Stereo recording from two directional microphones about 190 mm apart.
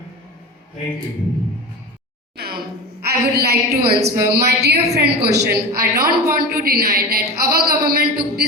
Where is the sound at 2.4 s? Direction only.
55° right (ahead or behind).